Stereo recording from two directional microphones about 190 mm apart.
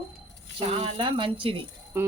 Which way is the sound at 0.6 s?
35° right (ahead or behind).